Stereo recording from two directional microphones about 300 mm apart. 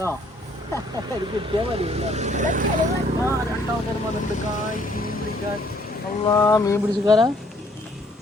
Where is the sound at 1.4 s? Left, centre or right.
Centre.